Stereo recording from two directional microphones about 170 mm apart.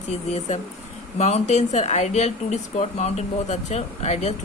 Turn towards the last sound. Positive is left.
turn(degrees=40)  # may be behind; listen again after turning